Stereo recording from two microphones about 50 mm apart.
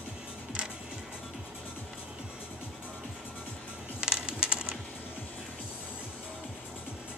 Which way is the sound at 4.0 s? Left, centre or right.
Centre.